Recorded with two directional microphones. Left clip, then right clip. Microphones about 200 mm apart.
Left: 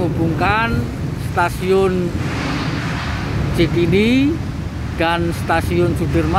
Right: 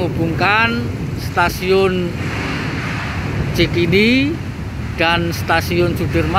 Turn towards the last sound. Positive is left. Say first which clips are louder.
# right 1 dB
turn(degrees=0)  # may be behind; listen again after turning